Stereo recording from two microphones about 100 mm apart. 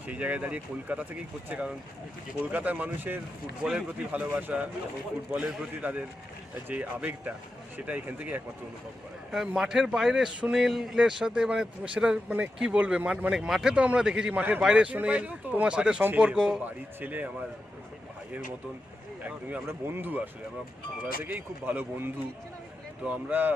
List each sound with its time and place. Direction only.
0.1 s a man's voice: 15° right (ahead or behind)
9.6 s a man's voice: 5° right (ahead or behind)
19.2 s a man's voice: 15° right (ahead or behind)